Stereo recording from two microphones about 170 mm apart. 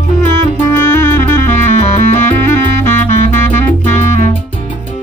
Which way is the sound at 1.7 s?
45° left (ahead or behind).